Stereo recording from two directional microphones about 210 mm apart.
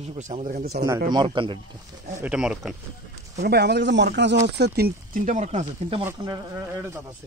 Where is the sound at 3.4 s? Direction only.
50° right (ahead or behind); by 6.0 s 30° right (ahead or behind).